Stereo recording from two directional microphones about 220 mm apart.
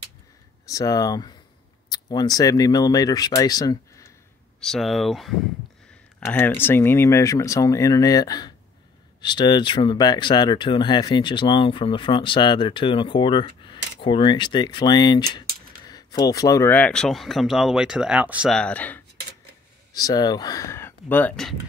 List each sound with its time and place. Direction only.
0.7 s speech: 15° left (ahead or behind)
4.6 s speech: centre (ahead or behind)